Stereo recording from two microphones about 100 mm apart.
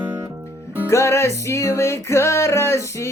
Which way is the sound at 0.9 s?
30° left (ahead or behind).